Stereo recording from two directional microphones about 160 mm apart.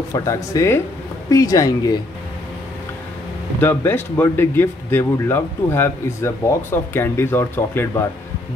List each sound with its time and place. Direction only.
0.1 s speech: 20° left (ahead or behind)
3.6 s speech: 15° left (ahead or behind)